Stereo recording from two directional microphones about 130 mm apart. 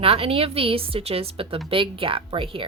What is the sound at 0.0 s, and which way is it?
A woman's voice, 45° right (ahead or behind).